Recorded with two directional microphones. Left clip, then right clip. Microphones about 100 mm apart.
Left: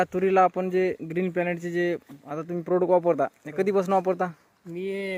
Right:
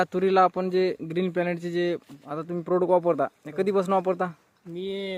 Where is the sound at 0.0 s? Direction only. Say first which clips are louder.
Even; 10° right (ahead or behind).